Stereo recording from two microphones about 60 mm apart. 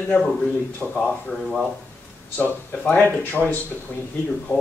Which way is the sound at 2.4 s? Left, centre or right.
Left.